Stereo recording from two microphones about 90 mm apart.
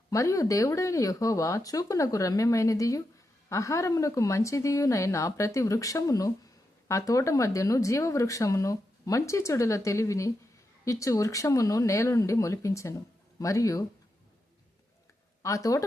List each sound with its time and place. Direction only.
0.1 s speech: 35° left (ahead or behind)
15.4 s speech: 40° left (ahead or behind)